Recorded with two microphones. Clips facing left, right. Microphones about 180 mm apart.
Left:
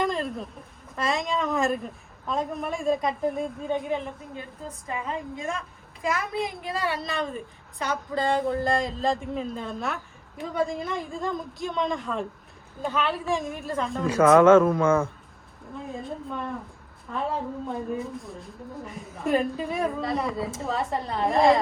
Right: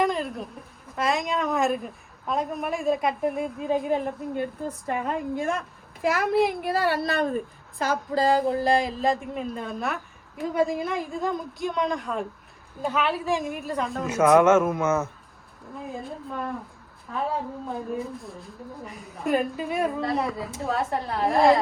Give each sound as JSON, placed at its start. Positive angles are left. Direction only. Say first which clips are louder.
{"t": 0.0, "sound": "a sound", "louder": "right 2 dB", "side_deg": 0}
{"t": 0.9, "sound": "speech", "louder": "right 1 dB", "side_deg": 0}
{"t": 3.8, "sound": "a woman's voice", "louder": "right 4 dB", "side_deg": -45}
{"t": 4.9, "sound": "a woman's voice", "louder": "right 4 dB", "side_deg": -65}
{"t": 8.8, "sound": "speech", "louder": "right 1 dB", "side_deg": 0}